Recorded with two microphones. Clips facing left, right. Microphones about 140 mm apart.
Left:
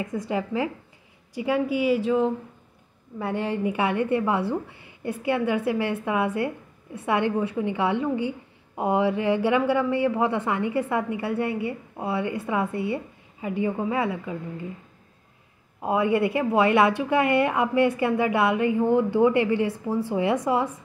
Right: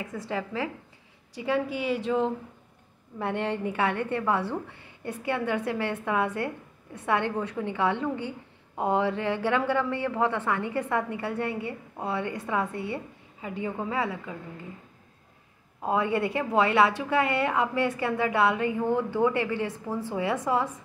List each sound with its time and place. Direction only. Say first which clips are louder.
0.1 s a woman's voice: left 3 dB; 15° left (ahead or behind)
15.8 s a woman's voice: left 4 dB; 10° left (ahead or behind)